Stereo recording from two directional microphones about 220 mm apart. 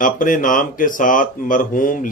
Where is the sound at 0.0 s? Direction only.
35° left (ahead or behind).